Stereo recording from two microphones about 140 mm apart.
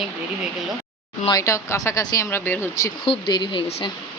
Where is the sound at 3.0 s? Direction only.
35° left (ahead or behind).